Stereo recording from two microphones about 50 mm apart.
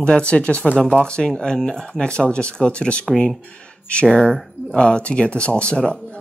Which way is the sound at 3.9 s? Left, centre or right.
Left.